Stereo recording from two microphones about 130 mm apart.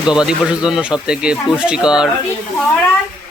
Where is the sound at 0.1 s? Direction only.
5° right (ahead or behind).